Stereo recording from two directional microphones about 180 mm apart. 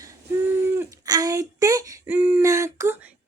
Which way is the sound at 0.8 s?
20° right (ahead or behind).